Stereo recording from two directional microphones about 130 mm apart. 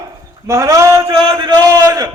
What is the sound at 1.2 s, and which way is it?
Speech, 35° right (ahead or behind).